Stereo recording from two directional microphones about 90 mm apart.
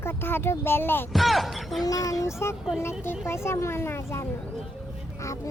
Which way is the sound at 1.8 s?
40° left (ahead or behind).